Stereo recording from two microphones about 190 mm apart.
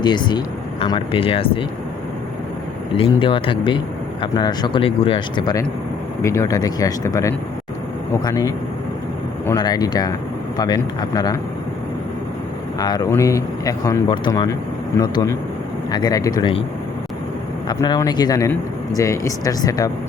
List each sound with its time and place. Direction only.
0.0 s speech: 25° left (ahead or behind)
2.9 s speech: 30° left (ahead or behind)
12.8 s speech: 20° left (ahead or behind)
17.7 s speech: 20° left (ahead or behind)